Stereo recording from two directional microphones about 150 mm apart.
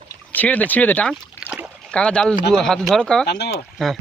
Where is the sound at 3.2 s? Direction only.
90° left.